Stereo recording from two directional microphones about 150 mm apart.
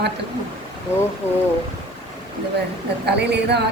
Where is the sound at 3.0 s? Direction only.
90° right.